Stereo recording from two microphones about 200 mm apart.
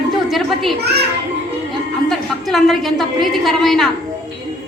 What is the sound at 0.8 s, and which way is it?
Speech, 55° right (ahead or behind).